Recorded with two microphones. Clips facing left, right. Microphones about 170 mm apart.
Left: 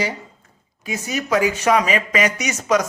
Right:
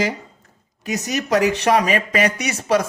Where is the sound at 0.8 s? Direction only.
40° right (ahead or behind).